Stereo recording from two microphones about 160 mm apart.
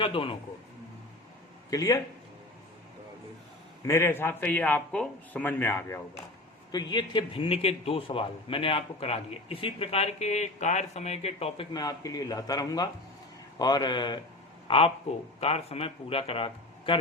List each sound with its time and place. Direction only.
0.0 s a man's voice: 35° left (ahead or behind)
1.7 s speech: 20° left (ahead or behind)
3.8 s a man's voice: 15° left (ahead or behind)
6.7 s a man's voice: 25° left (ahead or behind)